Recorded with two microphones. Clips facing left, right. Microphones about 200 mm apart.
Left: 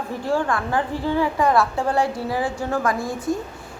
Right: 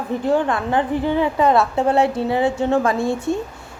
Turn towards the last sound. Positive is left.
turn(degrees=-25)  # may be behind; listen again after turning